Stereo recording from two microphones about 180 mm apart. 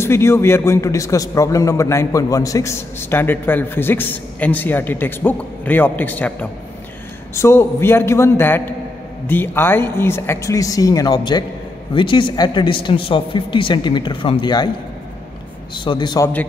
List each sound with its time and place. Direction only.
0.0 s a man's voice: 15° left (ahead or behind)
15.7 s a man's voice: 25° left (ahead or behind)